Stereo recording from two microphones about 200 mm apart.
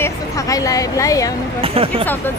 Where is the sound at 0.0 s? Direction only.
15° left (ahead or behind).